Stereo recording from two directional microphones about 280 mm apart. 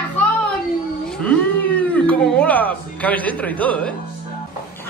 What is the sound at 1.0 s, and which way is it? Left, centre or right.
Speech, centre.